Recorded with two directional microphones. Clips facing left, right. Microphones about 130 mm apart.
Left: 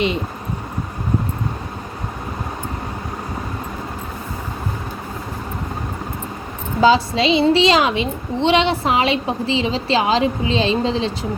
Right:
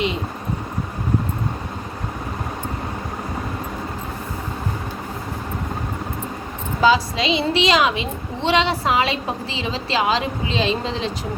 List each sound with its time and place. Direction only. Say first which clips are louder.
6.8 s a woman's voice: left 3 dB; 30° left (ahead or behind)